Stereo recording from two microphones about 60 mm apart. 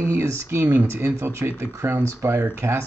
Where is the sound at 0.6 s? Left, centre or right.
Right.